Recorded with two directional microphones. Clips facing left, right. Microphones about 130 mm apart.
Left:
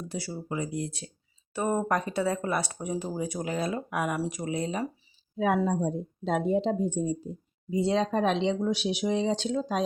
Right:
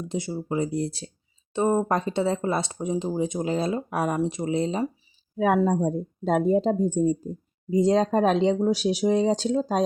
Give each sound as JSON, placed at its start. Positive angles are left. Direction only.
{"t": 0.1, "sound": "a woman's voice", "side_deg": -20}
{"t": 5.5, "sound": "a woman's voice", "side_deg": -40}